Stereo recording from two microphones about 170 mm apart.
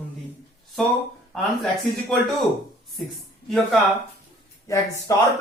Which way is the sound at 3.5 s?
Centre (ahead or behind).